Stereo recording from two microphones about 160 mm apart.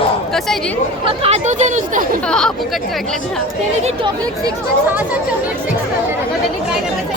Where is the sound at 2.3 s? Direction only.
5° left (ahead or behind).